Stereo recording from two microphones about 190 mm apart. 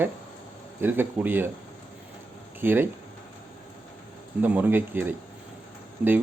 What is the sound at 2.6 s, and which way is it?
Speech, 10° right (ahead or behind).